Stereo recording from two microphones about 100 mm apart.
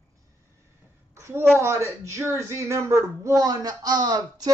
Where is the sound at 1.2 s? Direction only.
25° right (ahead or behind).